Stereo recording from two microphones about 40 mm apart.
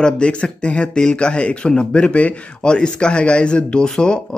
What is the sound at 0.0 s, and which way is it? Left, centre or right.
Speech, left.